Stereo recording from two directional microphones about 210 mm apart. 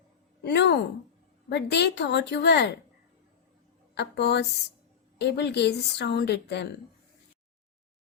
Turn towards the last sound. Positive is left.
turn(degrees=55)  # may be behind; listen again after turning